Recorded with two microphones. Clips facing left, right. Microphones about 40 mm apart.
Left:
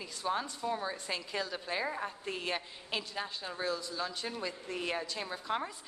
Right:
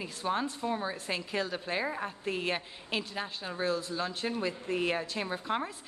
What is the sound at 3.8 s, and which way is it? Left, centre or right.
A woman's voice, right.